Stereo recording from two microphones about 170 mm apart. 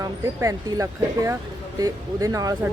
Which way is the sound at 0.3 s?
20° right (ahead or behind).